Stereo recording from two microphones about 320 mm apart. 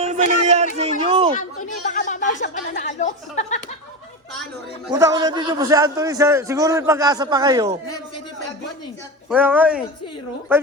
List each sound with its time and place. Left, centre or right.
0.0 s speech: right
1.8 s a sound: left
2.4 s a woman's voice: left
4.9 s a man's voice: centre
9.3 s a man's voice: centre